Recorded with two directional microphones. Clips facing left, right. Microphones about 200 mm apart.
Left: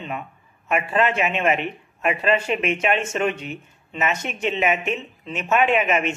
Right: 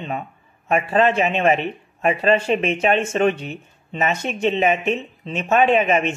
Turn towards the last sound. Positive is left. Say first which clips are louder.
# right 3 dB
turn(degrees=-30)  # may be behind; listen again after turning